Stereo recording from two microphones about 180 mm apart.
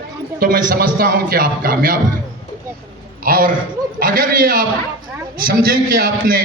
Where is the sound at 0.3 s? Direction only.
55° right (ahead or behind).